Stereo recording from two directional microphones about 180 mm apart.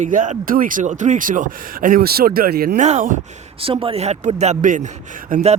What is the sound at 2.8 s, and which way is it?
Speech, 45° right (ahead or behind).